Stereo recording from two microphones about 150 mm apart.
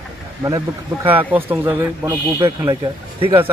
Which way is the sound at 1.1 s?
10° right (ahead or behind).